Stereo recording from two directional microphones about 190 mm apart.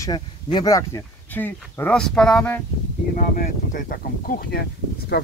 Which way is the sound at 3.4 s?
50° left (ahead or behind).